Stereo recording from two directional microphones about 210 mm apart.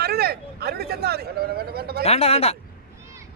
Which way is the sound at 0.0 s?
50° right (ahead or behind).